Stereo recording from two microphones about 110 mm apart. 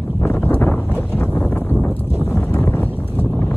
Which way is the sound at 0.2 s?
20° left (ahead or behind).